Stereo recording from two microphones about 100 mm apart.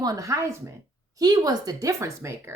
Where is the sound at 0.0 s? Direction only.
35° right (ahead or behind).